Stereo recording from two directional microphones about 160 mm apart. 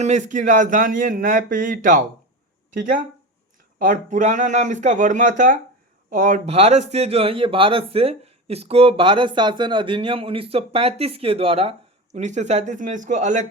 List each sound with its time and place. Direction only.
0.0 s a man's voice: 50° right (ahead or behind)
3.8 s a man's voice: 55° right (ahead or behind); by 11.7 s 35° right (ahead or behind)
12.1 s speech: 50° right (ahead or behind)